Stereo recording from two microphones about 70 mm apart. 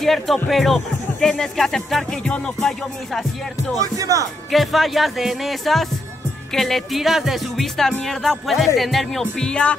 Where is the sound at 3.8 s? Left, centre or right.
Right.